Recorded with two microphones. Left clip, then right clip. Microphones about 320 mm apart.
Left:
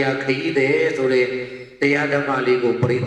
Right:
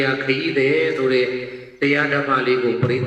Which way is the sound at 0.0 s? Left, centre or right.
Centre.